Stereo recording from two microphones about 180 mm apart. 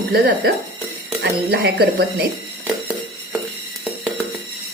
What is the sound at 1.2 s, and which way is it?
Speech, 65° right (ahead or behind).